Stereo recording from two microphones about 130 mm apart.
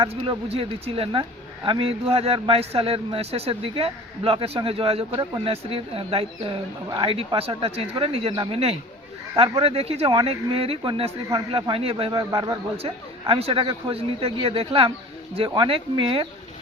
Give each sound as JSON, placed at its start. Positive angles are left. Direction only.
{"t": 0.0, "sound": "a man's voice", "side_deg": -45}
{"t": 11.3, "sound": "a man's voice", "side_deg": -30}
{"t": 12.3, "sound": "a man's voice", "side_deg": -35}
{"t": 12.7, "sound": "a man's voice", "side_deg": -50}